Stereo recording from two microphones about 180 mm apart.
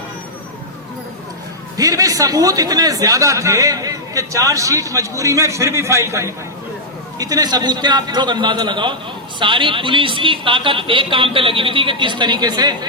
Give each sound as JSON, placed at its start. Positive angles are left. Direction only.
{"t": 1.7, "sound": "a man's voice", "side_deg": -20}